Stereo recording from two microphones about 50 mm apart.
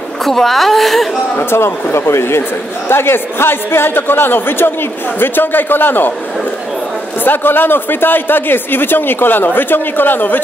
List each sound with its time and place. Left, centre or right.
0.2 s a woman's voice: centre
1.3 s speech: left
7.2 s speech: left